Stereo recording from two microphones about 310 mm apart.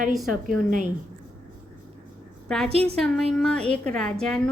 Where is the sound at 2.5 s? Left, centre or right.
Centre.